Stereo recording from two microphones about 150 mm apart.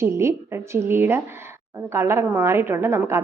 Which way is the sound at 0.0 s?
20° right (ahead or behind).